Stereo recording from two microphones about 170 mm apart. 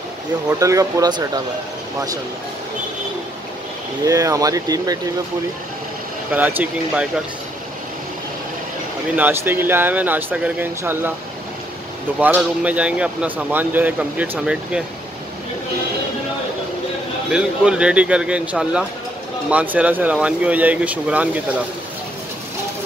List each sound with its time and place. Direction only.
0.5 s speech: 20° right (ahead or behind)
4.0 s speech: 20° right (ahead or behind)
6.3 s speech: 10° right (ahead or behind)
9.1 s speech: 10° right (ahead or behind)
12.2 s speech: 10° right (ahead or behind)
17.3 s speech: 5° right (ahead or behind)